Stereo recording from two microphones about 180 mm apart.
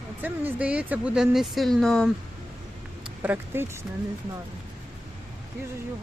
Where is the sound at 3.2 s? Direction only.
10° right (ahead or behind).